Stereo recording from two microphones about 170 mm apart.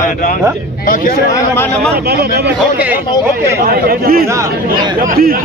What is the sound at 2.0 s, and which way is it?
Speech, 70° right (ahead or behind).